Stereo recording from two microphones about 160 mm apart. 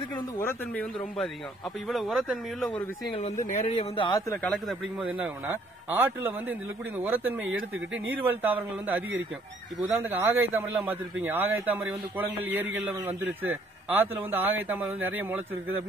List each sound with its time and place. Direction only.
0.4 s speech: 15° left (ahead or behind)
1.9 s speech: centre (ahead or behind)
3.6 s speech: 30° left (ahead or behind)
4.3 s speech: 5° left (ahead or behind)
4.9 s a man's voice: 10° right (ahead or behind)